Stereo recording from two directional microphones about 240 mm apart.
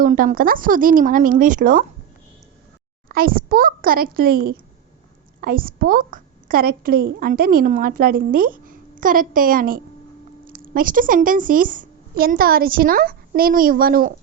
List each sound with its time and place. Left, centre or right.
0.0 s a woman's voice: right
3.1 s a woman's voice: right